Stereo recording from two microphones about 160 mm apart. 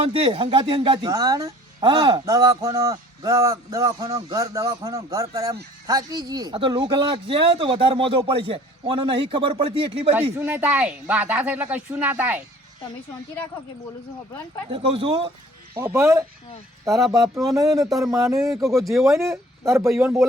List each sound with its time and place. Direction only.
0.0 s speech: 35° right (ahead or behind)
10.3 s speech: 10° right (ahead or behind)
14.7 s speech: 35° right (ahead or behind)
15.8 s speech: 15° right (ahead or behind)
17.5 s speech: 20° right (ahead or behind)
18.8 s speech: centre (ahead or behind)
19.3 s speech: 20° right (ahead or behind)